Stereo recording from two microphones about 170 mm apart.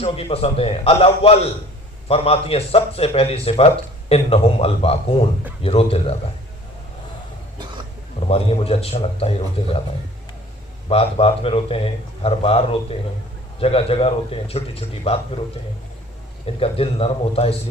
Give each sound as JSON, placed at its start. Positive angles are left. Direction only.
{"t": 0.0, "sound": "speech", "side_deg": 35}
{"t": 8.3, "sound": "speech", "side_deg": 35}
{"t": 10.8, "sound": "speech", "side_deg": 35}
{"t": 16.6, "sound": "speech", "side_deg": 35}